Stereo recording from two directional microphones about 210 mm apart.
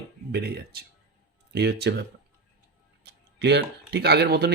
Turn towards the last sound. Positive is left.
turn(degrees=-50)  # may be behind; listen again after turning